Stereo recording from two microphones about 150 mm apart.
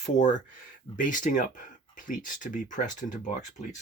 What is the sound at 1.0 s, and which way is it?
Speech, 60° left (ahead or behind).